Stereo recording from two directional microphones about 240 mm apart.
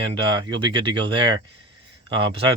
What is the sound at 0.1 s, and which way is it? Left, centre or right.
Speech, centre.